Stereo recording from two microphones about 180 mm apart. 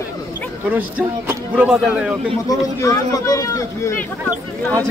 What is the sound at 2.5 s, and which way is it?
Speech, 20° left (ahead or behind).